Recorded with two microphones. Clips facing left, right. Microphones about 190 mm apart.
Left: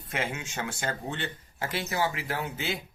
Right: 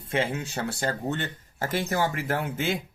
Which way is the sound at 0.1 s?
30° right (ahead or behind).